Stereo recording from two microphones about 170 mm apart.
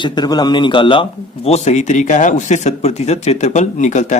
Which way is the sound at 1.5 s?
40° left (ahead or behind).